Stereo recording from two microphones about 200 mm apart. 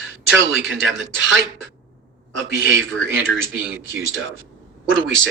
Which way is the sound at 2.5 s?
75° right (ahead or behind).